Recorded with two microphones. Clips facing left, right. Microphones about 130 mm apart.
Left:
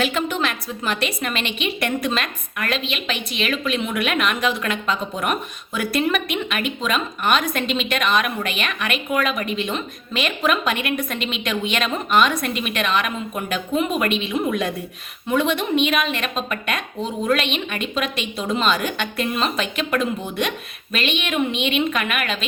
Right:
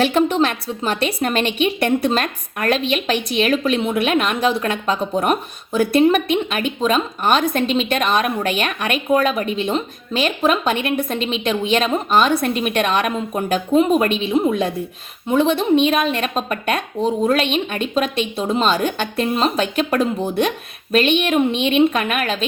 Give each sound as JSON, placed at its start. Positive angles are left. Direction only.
{"t": 0.0, "sound": "a woman's voice", "side_deg": -35}
{"t": 1.8, "sound": "a woman's voice", "side_deg": -30}